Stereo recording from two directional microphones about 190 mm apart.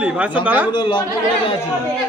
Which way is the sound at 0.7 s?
25° left (ahead or behind).